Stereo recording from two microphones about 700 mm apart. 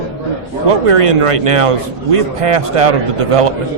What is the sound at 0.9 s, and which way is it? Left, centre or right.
A man's voice, right.